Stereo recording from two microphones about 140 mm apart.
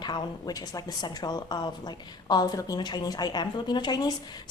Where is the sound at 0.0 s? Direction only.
30° left (ahead or behind).